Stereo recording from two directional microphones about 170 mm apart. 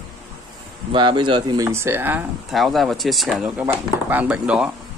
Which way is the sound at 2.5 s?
Centre (ahead or behind).